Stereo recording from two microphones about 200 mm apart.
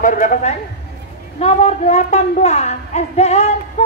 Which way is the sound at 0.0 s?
40° left (ahead or behind).